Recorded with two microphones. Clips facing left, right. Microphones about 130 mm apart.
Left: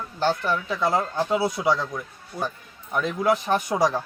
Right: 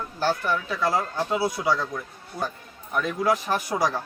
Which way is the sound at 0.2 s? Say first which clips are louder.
Left 1 dB; 25° left (ahead or behind).